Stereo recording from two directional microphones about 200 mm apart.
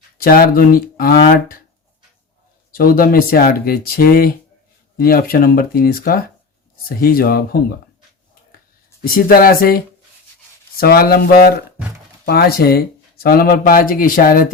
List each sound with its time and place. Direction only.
0.2 s speech: 45° left (ahead or behind)
2.7 s speech: 45° left (ahead or behind)
9.0 s speech: 45° left (ahead or behind)